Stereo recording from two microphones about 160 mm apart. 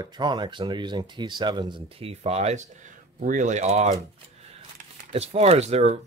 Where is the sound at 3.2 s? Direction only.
55° right (ahead or behind).